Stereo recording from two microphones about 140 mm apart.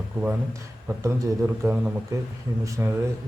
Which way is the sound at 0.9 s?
20° right (ahead or behind).